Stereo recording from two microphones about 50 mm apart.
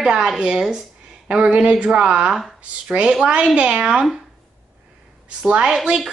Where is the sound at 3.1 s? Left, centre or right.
Centre.